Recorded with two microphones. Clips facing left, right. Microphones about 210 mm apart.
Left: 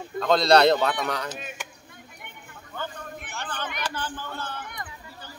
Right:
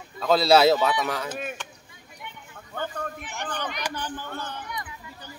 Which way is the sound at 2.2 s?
55° left (ahead or behind).